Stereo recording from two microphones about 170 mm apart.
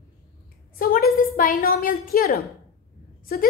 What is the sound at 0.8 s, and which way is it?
A woman's voice, 60° left (ahead or behind).